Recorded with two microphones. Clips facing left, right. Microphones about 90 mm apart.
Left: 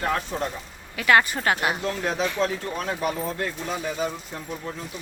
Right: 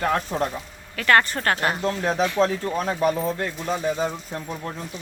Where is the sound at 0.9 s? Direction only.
10° left (ahead or behind).